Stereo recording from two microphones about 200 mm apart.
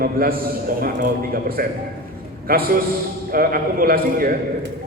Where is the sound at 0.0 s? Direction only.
45° right (ahead or behind).